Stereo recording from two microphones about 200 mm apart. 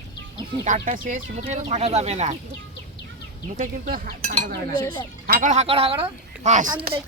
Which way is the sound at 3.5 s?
40° right (ahead or behind).